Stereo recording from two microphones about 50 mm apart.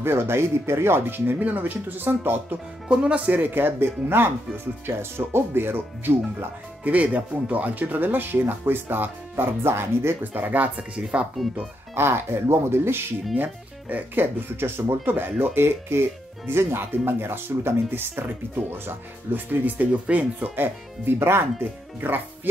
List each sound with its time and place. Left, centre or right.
0.0 s speech: right
2.9 s speech: right
3.3 s speech: right
6.8 s speech: right
10.3 s speech: right
11.9 s speech: right
13.4 s speech: right
20.5 s speech: right